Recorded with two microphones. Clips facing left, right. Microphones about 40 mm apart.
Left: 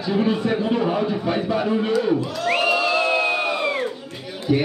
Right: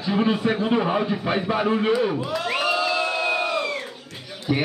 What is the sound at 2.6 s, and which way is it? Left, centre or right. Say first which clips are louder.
Crowd: left 3 dB; centre.